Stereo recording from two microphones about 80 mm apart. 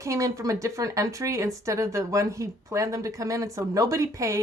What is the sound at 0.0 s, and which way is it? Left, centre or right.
Speech, right.